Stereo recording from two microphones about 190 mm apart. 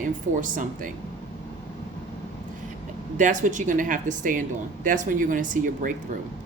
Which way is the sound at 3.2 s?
40° right (ahead or behind).